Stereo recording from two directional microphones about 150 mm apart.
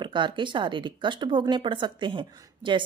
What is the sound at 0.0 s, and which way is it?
Speech, 30° right (ahead or behind).